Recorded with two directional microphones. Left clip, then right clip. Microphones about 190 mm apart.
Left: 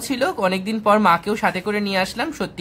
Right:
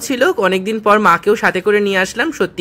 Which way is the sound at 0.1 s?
20° right (ahead or behind).